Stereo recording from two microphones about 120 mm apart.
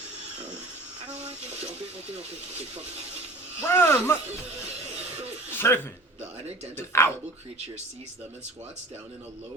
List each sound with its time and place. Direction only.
1.1 s speech: 65° right (ahead or behind)
3.6 s speech: 20° left (ahead or behind)
5.5 s speech: 20° left (ahead or behind)